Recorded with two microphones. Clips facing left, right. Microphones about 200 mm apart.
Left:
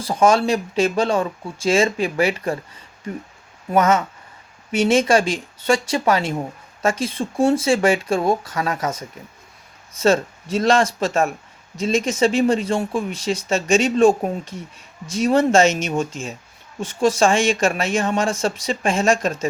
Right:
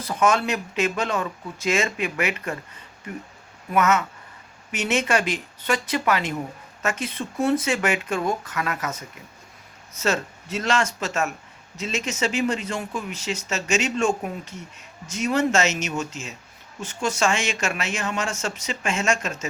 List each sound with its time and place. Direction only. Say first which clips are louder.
0.0 s speech: left 5 dB; 30° left (ahead or behind)
3.7 s speech: left 4 dB; 30° left (ahead or behind)
10.0 s speech: left 8 dB; 30° left (ahead or behind)